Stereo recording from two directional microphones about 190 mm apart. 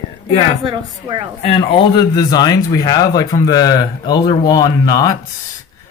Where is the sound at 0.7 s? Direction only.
25° right (ahead or behind).